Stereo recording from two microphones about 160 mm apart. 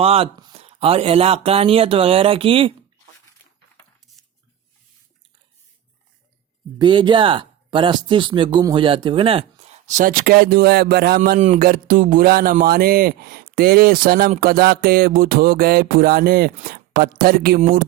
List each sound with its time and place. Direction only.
0.0 s speech: 40° right (ahead or behind)
6.7 s speech: 30° right (ahead or behind); by 11.2 s 85° right
11.2 s a sound: 50° right (ahead or behind); by 17.6 s 70° right (ahead or behind)
17.6 s speech: 60° right (ahead or behind)